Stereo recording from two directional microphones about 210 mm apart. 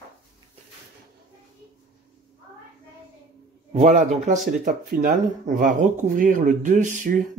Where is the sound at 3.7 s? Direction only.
30° right (ahead or behind).